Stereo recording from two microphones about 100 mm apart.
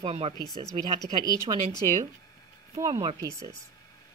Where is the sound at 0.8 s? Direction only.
45° right (ahead or behind).